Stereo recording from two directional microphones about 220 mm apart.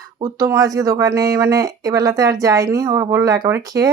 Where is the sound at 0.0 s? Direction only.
15° right (ahead or behind).